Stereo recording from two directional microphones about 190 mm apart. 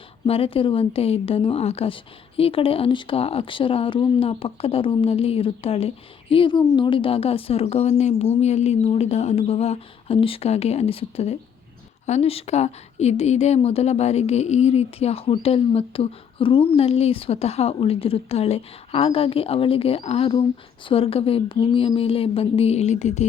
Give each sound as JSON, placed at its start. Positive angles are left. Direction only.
{"t": 0.3, "sound": "speech", "side_deg": 30}